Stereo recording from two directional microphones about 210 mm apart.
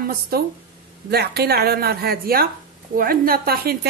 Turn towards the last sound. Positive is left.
turn(degrees=-45)  # may be behind; listen again after turning